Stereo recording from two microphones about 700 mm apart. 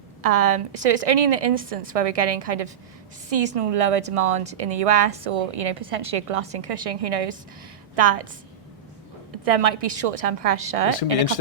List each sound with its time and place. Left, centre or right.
0.2 s a woman's voice: right
9.4 s a woman's voice: right